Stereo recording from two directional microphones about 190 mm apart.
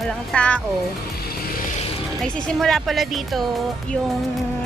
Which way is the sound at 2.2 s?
5° left (ahead or behind).